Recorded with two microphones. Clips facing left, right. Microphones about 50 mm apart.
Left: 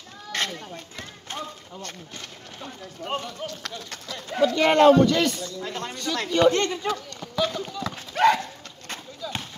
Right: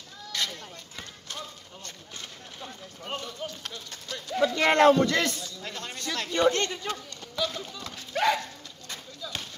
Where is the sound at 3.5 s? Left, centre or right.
Left.